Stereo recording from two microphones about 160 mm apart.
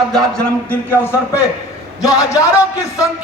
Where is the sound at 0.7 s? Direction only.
10° left (ahead or behind).